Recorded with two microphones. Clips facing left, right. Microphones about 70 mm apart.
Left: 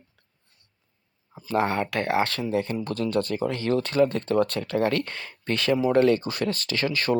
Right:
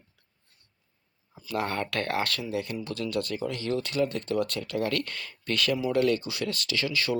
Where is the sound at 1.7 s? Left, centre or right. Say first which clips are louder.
Left 4 dB; centre.